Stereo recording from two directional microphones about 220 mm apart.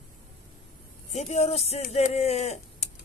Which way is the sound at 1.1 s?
30° left (ahead or behind).